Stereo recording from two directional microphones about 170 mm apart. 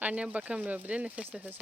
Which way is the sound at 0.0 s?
10° right (ahead or behind).